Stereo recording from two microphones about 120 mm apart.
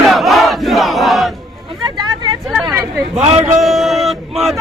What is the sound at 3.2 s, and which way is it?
Speech, 60° right (ahead or behind).